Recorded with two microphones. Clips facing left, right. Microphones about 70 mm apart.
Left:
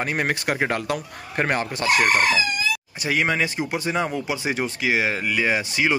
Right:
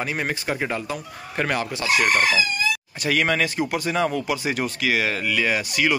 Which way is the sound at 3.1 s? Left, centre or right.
Centre.